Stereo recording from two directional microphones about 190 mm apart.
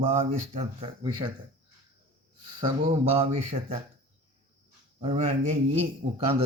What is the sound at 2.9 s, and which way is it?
Speech, 30° right (ahead or behind).